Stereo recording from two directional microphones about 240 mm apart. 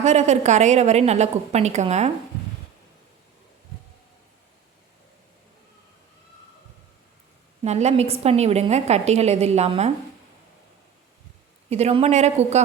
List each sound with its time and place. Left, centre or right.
0.0 s a woman's voice: right
7.6 s a woman's voice: right
11.7 s a woman's voice: right